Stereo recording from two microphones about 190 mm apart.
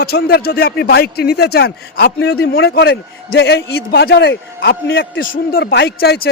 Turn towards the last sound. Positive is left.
turn(degrees=55)  # may be behind; listen again after turning